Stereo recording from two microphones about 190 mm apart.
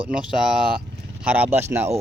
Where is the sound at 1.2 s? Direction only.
10° right (ahead or behind).